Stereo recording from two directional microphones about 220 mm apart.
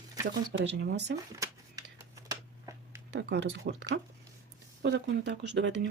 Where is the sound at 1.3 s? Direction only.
15° right (ahead or behind).